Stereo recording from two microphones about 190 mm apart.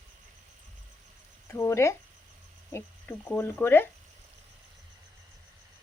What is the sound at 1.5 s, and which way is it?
Speech, 15° left (ahead or behind).